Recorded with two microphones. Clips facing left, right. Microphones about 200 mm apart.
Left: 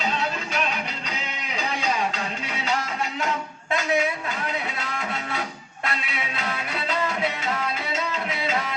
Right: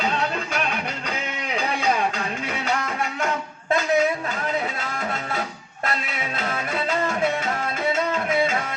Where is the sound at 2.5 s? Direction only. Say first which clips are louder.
Right 1 dB; 50° right (ahead or behind).